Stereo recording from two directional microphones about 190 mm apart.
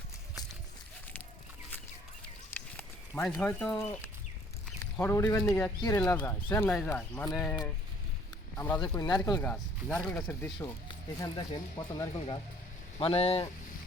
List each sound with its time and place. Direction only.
2.5 s a sound: 10° left (ahead or behind)
4.8 s speech: 15° left (ahead or behind)
8.5 s speech: 10° left (ahead or behind)
9.4 s speech: 5° left (ahead or behind)
11.2 s speech: 20° left (ahead or behind)